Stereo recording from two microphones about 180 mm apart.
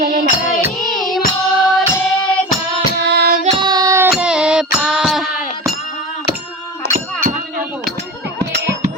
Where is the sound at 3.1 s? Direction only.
65° right (ahead or behind).